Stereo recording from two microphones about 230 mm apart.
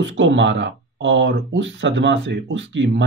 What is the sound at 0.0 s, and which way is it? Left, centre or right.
Speech, right.